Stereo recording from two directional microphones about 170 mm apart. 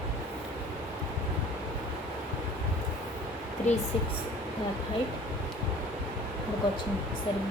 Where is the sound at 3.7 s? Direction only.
40° left (ahead or behind).